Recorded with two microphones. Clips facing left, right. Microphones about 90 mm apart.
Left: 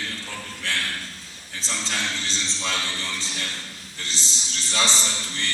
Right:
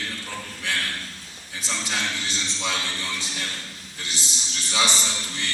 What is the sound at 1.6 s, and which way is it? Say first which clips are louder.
A man's voice: right 1 dB; 15° right (ahead or behind).